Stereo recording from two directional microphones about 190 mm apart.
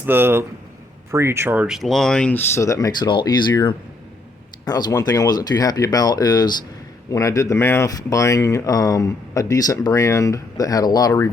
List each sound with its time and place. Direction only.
0.0 s speech: 10° right (ahead or behind); by 11.3 s 15° left (ahead or behind)